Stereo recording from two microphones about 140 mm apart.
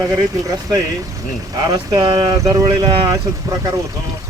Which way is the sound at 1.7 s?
30° right (ahead or behind).